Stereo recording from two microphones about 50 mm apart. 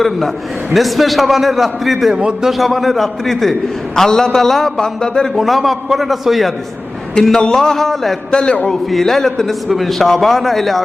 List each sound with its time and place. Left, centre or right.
0.7 s a man's voice: centre
5.3 s a man's voice: centre
7.2 s a man's voice: centre
8.3 s a man's voice: centre
8.9 s a man's voice: centre